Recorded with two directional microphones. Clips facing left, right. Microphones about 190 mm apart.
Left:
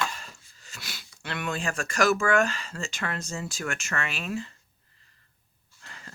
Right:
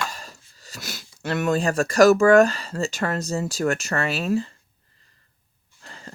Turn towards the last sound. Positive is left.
turn(degrees=-35)  # may be behind; listen again after turning